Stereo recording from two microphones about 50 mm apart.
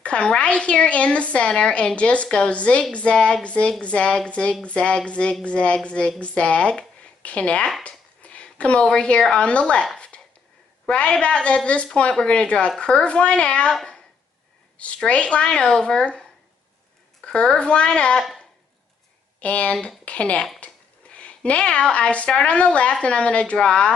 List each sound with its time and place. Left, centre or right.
0.0 s a woman's voice: left
7.8 s a sound: left
9.4 s a woman's voice: left
10.9 s a woman's voice: centre
15.0 s a woman's voice: left
17.2 s a woman's voice: centre
19.4 s a woman's voice: left